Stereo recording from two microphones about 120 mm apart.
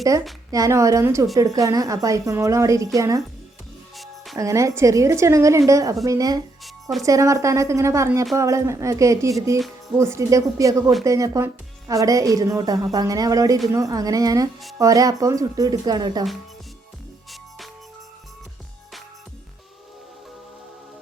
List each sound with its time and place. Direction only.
0.5 s a woman's voice: 30° right (ahead or behind)
3.9 s music: centre (ahead or behind)
4.4 s a woman's voice: 25° right (ahead or behind)